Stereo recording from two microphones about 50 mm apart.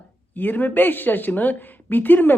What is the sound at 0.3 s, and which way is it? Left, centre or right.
Speech, left.